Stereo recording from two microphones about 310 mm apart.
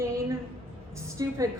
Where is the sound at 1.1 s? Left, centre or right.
Centre.